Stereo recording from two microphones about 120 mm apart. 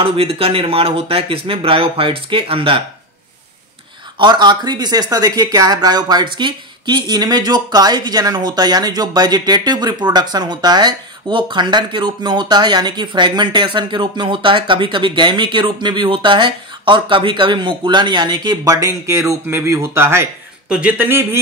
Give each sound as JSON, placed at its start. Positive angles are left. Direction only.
{"t": 0.0, "sound": "speech", "side_deg": -50}
{"t": 4.2, "sound": "speech", "side_deg": -35}
{"t": 20.6, "sound": "speech", "side_deg": -10}